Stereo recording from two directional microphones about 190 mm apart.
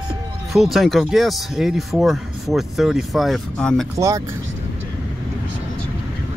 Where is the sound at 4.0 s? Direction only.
15° right (ahead or behind).